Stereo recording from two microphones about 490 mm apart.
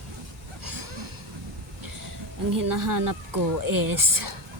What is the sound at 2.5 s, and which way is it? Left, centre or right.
Speech, right.